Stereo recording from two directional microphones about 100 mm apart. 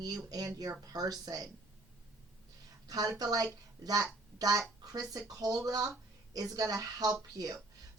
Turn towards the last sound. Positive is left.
turn(degrees=-35)  # may be behind; listen again after turning